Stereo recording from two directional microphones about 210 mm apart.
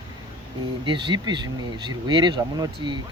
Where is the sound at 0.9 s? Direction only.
20° right (ahead or behind).